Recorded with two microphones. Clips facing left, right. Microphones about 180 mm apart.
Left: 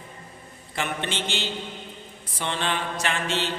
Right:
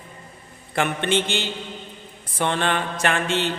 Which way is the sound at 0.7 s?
55° right (ahead or behind).